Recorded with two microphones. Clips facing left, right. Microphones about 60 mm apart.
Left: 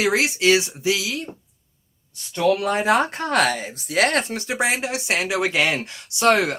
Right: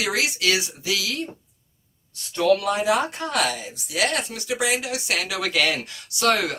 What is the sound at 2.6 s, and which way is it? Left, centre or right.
A woman's voice, left.